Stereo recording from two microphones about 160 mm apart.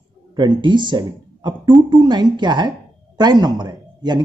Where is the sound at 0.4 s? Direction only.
30° right (ahead or behind).